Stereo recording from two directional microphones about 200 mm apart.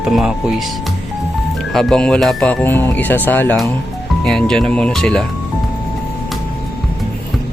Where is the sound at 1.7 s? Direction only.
Centre (ahead or behind).